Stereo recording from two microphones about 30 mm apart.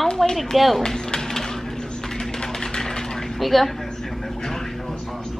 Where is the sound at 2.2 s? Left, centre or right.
Left.